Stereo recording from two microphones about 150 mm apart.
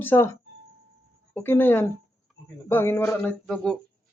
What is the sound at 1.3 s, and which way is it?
A man's voice, 15° left (ahead or behind).